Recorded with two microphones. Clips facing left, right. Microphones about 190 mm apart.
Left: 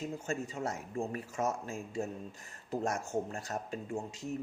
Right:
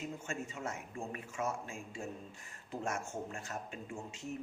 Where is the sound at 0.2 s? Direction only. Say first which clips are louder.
Left 5 dB; 35° left (ahead or behind).